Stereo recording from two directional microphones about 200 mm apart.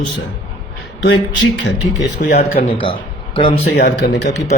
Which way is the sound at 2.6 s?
45° left (ahead or behind).